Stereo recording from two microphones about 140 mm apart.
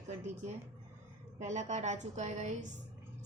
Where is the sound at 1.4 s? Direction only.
55° right (ahead or behind).